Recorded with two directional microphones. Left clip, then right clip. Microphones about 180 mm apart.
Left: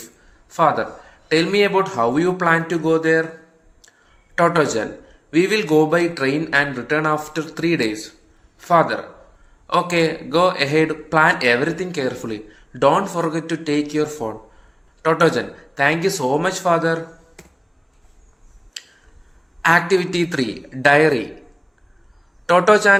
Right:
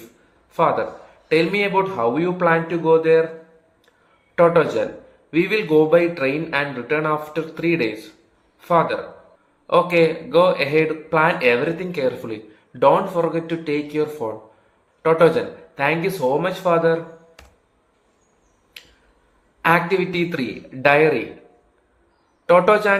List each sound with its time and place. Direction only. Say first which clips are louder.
0.5 s a man's voice: left 1 dB; 45° left (ahead or behind)
4.4 s a man's voice: right 1 dB; 40° left (ahead or behind)
19.6 s a man's voice: left 2 dB; 35° left (ahead or behind)
22.4 s a man's voice: left 1 dB; 30° left (ahead or behind)